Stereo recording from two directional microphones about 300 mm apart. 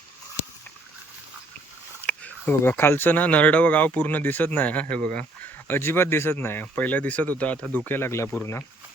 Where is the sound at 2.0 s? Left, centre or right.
Centre.